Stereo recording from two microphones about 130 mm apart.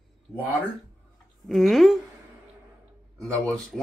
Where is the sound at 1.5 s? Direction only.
Centre (ahead or behind).